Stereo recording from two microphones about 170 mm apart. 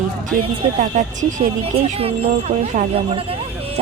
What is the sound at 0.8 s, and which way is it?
Speech, 45° right (ahead or behind).